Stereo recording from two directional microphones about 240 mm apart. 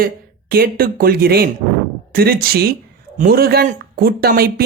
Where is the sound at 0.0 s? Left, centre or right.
Right.